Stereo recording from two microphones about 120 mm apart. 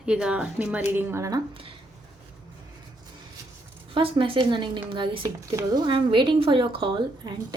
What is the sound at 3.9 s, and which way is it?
A woman's voice, 45° right (ahead or behind).